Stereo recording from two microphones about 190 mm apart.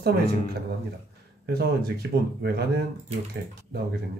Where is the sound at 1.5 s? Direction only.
55° right (ahead or behind).